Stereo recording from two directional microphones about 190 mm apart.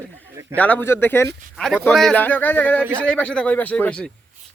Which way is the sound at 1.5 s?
Centre (ahead or behind).